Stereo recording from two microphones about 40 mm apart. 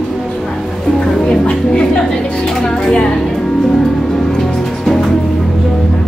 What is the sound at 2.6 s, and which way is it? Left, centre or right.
Speech, centre.